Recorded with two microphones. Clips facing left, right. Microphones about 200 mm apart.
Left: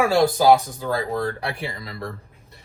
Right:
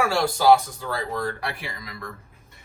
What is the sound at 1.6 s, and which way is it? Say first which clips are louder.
Speech: left 6 dB; 30° left (ahead or behind).